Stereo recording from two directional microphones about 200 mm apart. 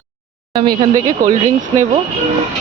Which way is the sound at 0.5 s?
20° right (ahead or behind).